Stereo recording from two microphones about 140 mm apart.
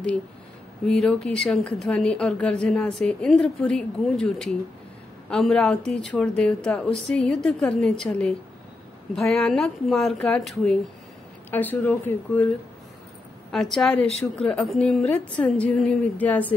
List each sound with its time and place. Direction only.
0.8 s a woman's voice: 5° left (ahead or behind)
13.5 s a woman's voice: centre (ahead or behind)